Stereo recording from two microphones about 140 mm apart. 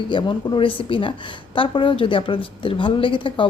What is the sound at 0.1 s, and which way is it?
A woman's voice, 35° left (ahead or behind).